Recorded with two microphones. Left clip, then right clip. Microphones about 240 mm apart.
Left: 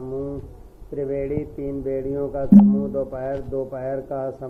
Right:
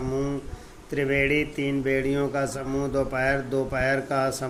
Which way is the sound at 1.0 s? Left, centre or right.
Right.